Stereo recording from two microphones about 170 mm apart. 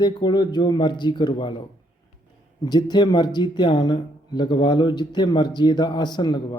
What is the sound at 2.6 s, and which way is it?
Speech, 25° left (ahead or behind).